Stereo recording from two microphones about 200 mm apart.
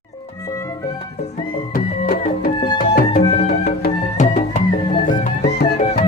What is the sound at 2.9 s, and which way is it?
Music, 45° left (ahead or behind).